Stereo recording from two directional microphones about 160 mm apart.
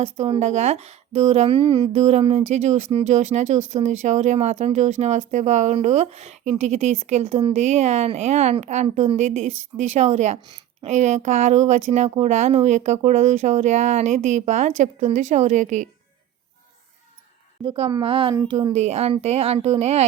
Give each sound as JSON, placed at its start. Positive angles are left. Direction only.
{"t": 0.0, "sound": "speech", "side_deg": -40}
{"t": 1.9, "sound": "speech", "side_deg": -40}
{"t": 17.6, "sound": "speech", "side_deg": -35}
{"t": 18.7, "sound": "speech", "side_deg": -45}